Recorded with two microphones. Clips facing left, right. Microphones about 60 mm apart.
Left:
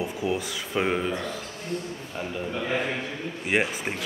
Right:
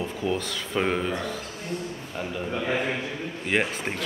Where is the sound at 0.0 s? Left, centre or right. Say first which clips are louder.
Even; centre.